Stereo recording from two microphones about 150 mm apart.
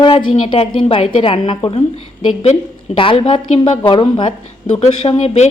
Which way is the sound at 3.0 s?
35° left (ahead or behind).